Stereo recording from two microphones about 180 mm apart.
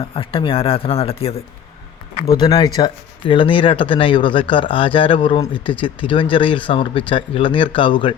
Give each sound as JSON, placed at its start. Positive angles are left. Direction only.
{"t": 0.2, "sound": "speech", "side_deg": 30}
{"t": 2.3, "sound": "speech", "side_deg": 20}